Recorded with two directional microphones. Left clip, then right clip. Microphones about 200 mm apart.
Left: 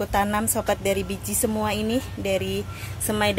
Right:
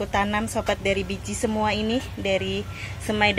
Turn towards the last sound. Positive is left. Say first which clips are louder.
# right 2 dB
turn(degrees=15)  # may be behind; listen again after turning